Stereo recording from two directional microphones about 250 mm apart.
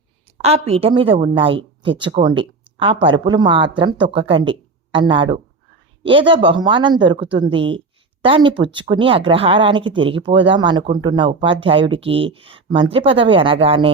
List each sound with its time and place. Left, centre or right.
0.4 s a woman's voice: right